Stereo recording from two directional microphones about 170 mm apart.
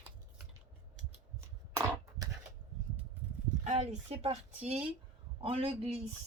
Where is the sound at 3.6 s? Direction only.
40° right (ahead or behind).